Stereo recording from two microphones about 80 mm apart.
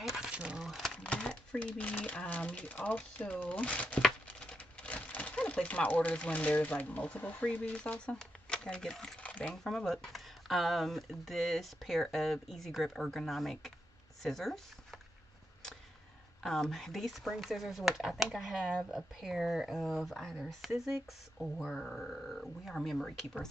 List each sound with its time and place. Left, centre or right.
0.0 s a sound: centre
0.9 s speech: centre
16.4 s speech: centre